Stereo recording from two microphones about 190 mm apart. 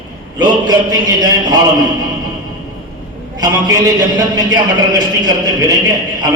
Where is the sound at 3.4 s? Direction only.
20° right (ahead or behind).